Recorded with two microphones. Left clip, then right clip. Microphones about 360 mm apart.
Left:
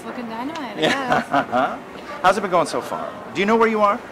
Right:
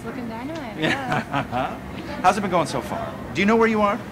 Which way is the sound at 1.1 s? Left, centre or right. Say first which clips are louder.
Left 6 dB; left.